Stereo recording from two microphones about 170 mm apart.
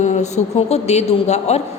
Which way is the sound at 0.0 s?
45° left (ahead or behind).